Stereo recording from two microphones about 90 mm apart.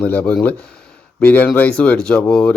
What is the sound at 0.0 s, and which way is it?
A man's voice, 15° left (ahead or behind).